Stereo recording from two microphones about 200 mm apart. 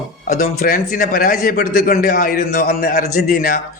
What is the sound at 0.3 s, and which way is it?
A man's voice, 45° left (ahead or behind).